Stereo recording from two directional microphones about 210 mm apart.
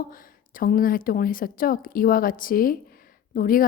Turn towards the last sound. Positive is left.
turn(degrees=40)  # may be behind; listen again after turning